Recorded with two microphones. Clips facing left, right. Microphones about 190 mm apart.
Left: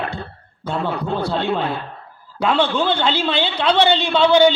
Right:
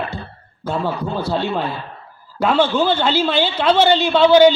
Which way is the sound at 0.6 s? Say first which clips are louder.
Right 1 dB; 5° right (ahead or behind).